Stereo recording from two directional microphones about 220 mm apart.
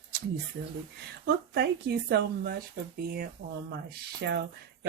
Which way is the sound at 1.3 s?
50° right (ahead or behind).